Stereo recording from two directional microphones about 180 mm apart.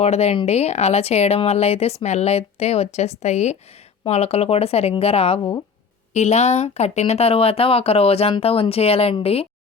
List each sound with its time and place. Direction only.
0.0 s speech: 35° left (ahead or behind)
5.4 s speech: 20° left (ahead or behind)
6.1 s speech: 40° left (ahead or behind)